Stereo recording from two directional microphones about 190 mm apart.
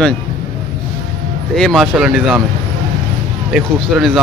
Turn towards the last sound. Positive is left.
turn(degrees=0)  # may be behind; listen again after turning